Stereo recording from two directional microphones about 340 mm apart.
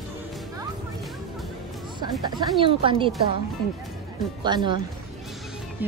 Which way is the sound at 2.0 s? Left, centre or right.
Centre.